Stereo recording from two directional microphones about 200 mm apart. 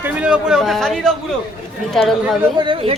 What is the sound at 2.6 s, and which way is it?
Speech, 25° right (ahead or behind).